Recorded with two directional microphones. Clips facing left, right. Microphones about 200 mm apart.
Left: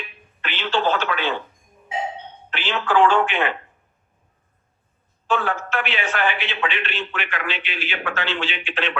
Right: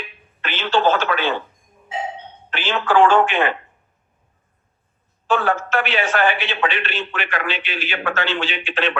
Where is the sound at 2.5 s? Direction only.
45° right (ahead or behind).